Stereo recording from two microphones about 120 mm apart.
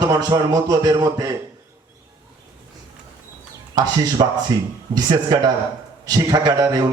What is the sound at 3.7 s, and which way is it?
Music, 35° right (ahead or behind).